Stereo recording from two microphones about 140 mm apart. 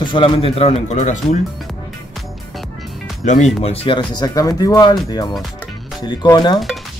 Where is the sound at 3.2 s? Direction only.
55° left (ahead or behind); by 4.9 s 25° left (ahead or behind).